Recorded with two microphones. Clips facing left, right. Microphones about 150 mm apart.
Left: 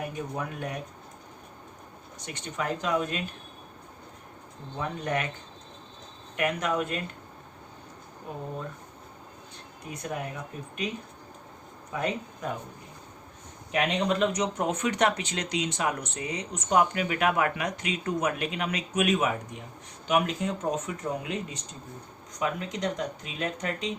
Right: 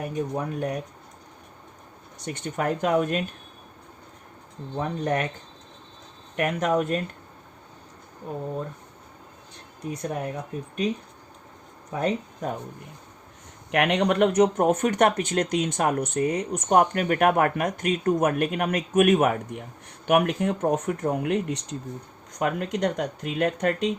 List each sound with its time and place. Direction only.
0.0 s speech: 40° right (ahead or behind)
2.2 s speech: 50° right (ahead or behind)
4.8 s speech: 40° right (ahead or behind)
6.3 s speech: 40° right (ahead or behind)
9.9 s speech: 40° right (ahead or behind)
11.9 s speech: 40° right (ahead or behind)
13.7 s speech: 65° right (ahead or behind)
22.3 s speech: 55° right (ahead or behind)